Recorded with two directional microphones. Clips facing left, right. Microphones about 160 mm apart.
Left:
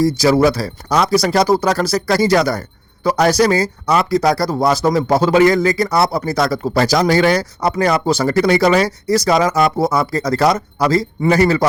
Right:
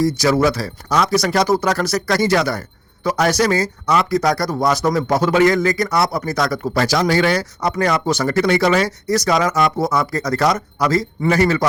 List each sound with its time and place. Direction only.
0.2 s speech: 35° left (ahead or behind)